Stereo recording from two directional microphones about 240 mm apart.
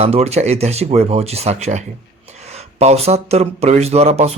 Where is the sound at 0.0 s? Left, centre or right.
Right.